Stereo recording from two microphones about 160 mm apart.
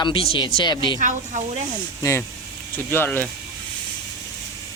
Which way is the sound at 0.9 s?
50° right (ahead or behind).